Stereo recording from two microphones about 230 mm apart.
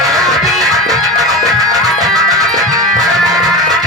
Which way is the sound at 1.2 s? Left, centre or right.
Centre.